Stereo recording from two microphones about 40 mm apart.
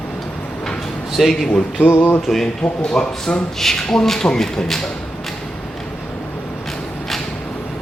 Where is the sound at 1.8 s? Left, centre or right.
Left.